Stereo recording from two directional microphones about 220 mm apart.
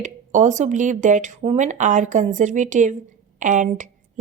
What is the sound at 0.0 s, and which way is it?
Speech, 35° right (ahead or behind).